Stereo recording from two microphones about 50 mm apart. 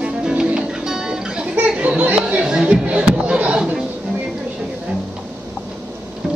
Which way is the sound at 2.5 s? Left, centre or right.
Centre.